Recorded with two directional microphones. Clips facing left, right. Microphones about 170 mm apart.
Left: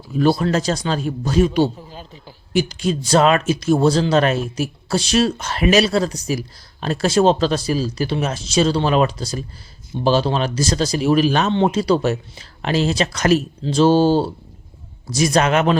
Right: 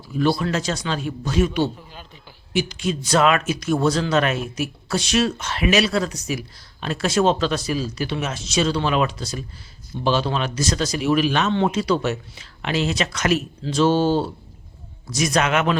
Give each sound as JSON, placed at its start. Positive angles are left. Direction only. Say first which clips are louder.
{"t": 0.2, "sound": "a man's voice", "louder": "left 4 dB", "side_deg": 40}